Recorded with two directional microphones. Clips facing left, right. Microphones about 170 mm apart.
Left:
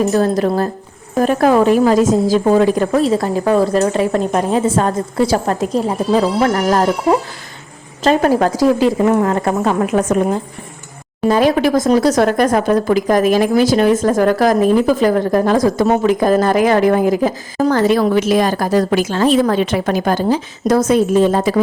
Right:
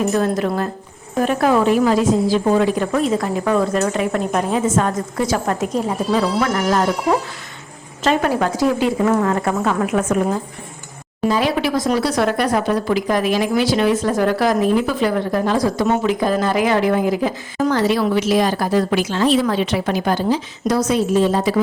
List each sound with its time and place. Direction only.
0.1 s a woman's voice: 35° left (ahead or behind)
8.0 s a woman's voice: 40° left (ahead or behind)
11.3 s a woman's voice: 45° left (ahead or behind)